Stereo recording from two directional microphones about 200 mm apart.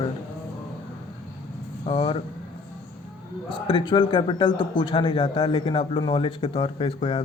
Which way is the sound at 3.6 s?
25° left (ahead or behind).